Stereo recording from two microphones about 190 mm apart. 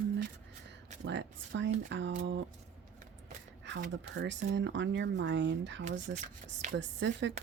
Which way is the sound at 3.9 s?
70° right (ahead or behind).